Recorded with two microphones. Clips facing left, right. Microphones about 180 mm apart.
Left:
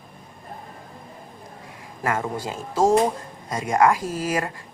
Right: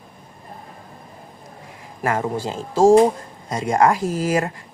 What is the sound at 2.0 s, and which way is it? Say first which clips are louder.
A man's voice: right 3 dB; 25° right (ahead or behind).